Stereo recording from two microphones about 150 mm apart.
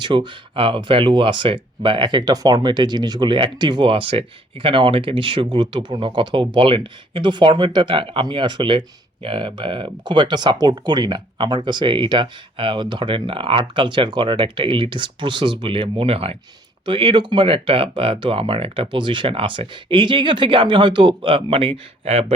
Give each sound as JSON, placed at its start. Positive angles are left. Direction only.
{"t": 0.0, "sound": "speech", "side_deg": -30}